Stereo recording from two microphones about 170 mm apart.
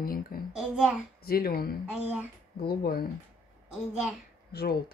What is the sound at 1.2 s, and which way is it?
Speech, 65° left (ahead or behind).